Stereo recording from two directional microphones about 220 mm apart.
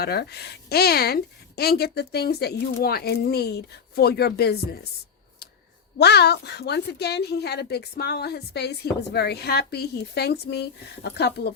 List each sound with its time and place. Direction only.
0.0 s speech: 45° left (ahead or behind)
6.0 s speech: 50° left (ahead or behind)